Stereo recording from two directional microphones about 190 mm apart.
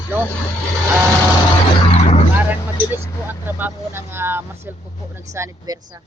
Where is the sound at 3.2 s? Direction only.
10° right (ahead or behind).